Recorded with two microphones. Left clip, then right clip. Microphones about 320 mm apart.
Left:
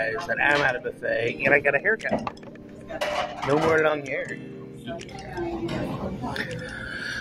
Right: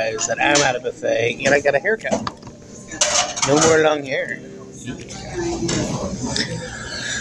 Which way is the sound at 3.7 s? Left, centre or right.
Left.